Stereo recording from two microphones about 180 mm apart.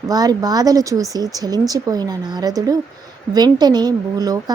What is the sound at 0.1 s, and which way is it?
Speech, 20° right (ahead or behind).